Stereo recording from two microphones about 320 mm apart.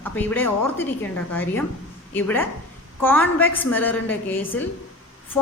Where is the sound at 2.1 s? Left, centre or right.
Centre.